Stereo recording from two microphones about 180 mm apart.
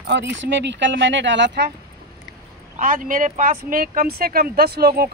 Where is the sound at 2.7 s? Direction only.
50° right (ahead or behind).